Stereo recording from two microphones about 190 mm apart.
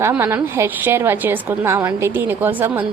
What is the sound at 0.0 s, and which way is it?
A woman's voice, 10° right (ahead or behind).